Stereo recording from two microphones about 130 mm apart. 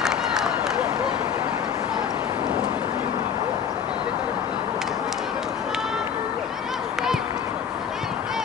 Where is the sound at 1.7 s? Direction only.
25° right (ahead or behind).